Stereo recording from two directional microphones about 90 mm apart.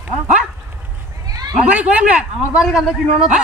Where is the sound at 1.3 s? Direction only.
45° right (ahead or behind).